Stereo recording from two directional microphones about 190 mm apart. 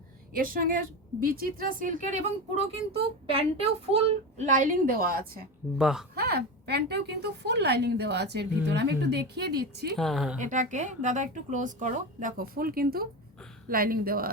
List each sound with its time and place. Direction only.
0.3 s speech: 50° right (ahead or behind)
5.7 s speech: 5° right (ahead or behind)
6.1 s a woman's voice: 55° right (ahead or behind)
10.0 s speech: centre (ahead or behind)
10.3 s speech: 40° right (ahead or behind)